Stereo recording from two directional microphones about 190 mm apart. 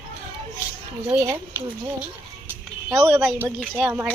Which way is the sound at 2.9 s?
15° right (ahead or behind).